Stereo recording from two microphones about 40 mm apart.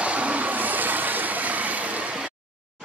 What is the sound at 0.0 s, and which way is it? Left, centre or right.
Vehicle, right.